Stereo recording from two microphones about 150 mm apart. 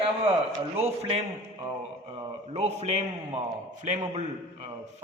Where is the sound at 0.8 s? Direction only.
40° right (ahead or behind).